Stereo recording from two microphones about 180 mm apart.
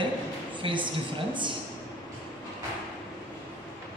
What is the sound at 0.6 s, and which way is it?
Speech, 25° right (ahead or behind).